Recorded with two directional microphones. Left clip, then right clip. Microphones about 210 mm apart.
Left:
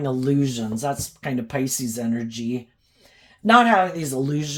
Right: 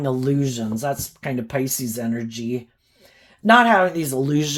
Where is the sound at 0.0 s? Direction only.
35° right (ahead or behind).